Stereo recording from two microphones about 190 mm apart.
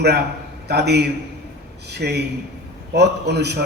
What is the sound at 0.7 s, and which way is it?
A man's voice, 60° right (ahead or behind).